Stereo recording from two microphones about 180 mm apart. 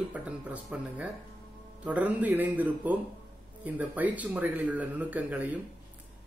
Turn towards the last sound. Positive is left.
turn(degrees=-10)  # may be behind; listen again after turning